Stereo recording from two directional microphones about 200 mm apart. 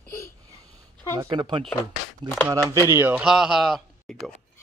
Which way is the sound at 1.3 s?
25° right (ahead or behind).